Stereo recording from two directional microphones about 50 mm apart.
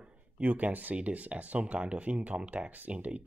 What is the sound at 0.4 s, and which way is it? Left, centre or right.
Speech, right.